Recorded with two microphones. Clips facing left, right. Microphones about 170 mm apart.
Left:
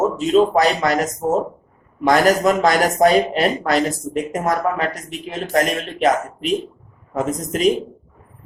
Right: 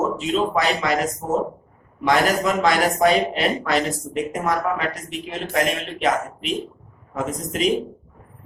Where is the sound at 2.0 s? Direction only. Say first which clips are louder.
Left 4 dB; 40° left (ahead or behind).